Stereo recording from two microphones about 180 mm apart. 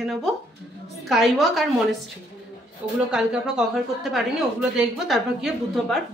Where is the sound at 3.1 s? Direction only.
5° right (ahead or behind).